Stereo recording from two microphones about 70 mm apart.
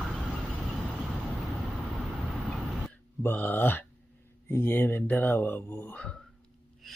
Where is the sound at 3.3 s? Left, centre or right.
Left.